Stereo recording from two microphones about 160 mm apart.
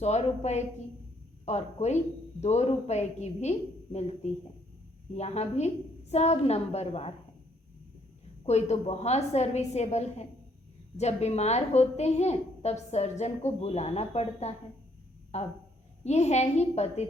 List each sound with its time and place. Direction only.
0.0 s a woman's voice: 45° left (ahead or behind)
5.1 s a woman's voice: 45° left (ahead or behind)
8.4 s a woman's voice: 45° left (ahead or behind)